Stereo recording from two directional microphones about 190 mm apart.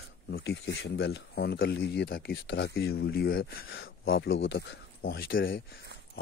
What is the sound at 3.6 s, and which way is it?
Speech, 90° left.